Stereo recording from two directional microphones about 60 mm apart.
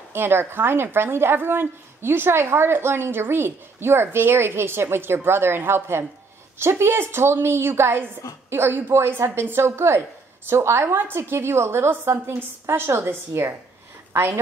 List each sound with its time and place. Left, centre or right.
0.1 s a woman's voice: right